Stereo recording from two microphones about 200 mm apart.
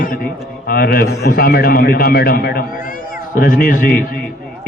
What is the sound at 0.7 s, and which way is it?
A man's voice, 50° left (ahead or behind).